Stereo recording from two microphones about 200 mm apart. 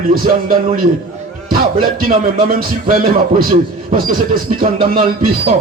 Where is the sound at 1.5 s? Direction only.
45° right (ahead or behind).